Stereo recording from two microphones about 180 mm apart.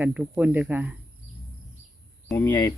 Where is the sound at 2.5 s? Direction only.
25° left (ahead or behind).